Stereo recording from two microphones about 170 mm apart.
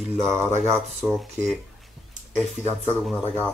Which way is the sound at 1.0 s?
Centre (ahead or behind).